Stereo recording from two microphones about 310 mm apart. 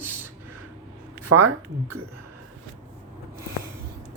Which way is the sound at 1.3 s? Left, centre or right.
Right.